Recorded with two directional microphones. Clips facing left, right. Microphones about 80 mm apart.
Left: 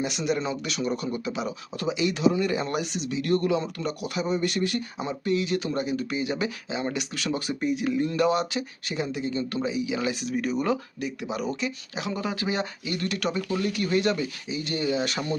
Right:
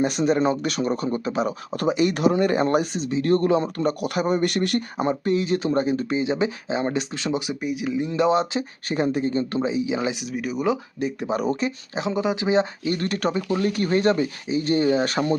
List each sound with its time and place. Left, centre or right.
0.0 s speech: right
4.0 s speech: right
7.6 s speech: centre
8.1 s speech: right
8.9 s speech: right
10.2 s speech: centre
11.0 s speech: right